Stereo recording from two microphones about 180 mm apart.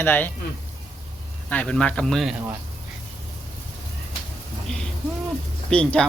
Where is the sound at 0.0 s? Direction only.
10° left (ahead or behind).